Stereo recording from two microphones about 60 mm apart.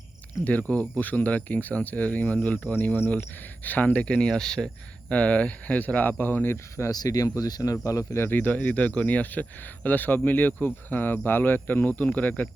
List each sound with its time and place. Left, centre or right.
0.4 s speech: left
5.1 s speech: left
6.9 s speech: left
8.3 s speech: left